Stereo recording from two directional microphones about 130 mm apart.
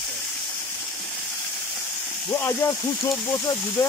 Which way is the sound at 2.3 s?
20° left (ahead or behind).